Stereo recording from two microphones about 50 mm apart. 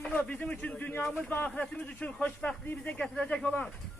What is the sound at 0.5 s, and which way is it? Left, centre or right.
Music, left.